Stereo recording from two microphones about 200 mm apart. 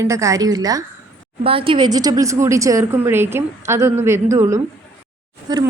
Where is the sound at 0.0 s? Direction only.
15° right (ahead or behind).